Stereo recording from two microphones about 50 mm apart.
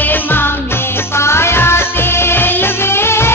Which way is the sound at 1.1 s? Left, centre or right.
Left.